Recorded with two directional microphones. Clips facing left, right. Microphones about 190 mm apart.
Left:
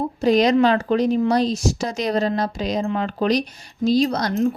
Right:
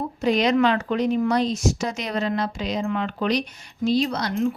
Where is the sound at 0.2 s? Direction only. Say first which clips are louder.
Left 3 dB; 35° left (ahead or behind).